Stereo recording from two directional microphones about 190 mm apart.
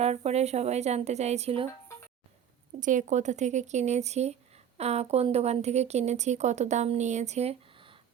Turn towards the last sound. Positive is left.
turn(degrees=-35)  # may be behind; listen again after turning